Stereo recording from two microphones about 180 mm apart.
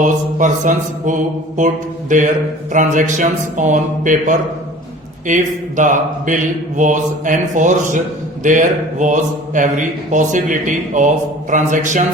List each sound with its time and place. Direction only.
0.0 s speech: 45° right (ahead or behind)